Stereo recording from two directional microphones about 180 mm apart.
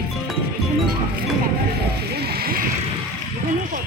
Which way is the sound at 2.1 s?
60° right (ahead or behind).